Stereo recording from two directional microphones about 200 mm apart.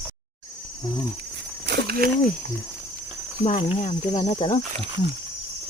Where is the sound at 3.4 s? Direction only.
35° left (ahead or behind).